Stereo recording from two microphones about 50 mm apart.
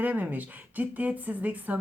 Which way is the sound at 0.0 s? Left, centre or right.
Right.